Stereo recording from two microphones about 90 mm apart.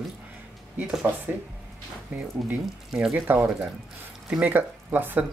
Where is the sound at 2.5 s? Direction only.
10° right (ahead or behind).